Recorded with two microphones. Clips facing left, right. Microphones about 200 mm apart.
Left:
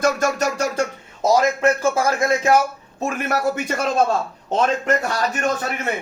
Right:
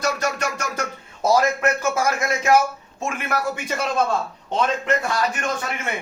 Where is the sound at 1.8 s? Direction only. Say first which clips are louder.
Left 3 dB; 30° left (ahead or behind).